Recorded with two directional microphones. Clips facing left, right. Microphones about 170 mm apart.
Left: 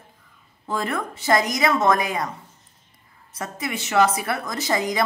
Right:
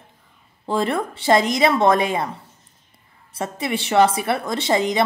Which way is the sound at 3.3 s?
30° right (ahead or behind).